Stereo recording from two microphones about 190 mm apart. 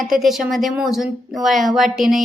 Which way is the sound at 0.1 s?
Centre (ahead or behind).